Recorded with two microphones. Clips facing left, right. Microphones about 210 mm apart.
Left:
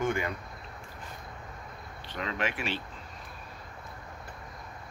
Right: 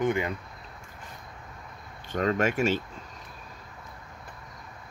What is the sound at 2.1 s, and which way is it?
Speech, 45° right (ahead or behind).